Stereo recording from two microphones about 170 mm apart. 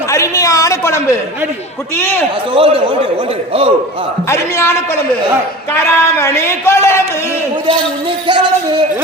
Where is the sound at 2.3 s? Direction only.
35° right (ahead or behind).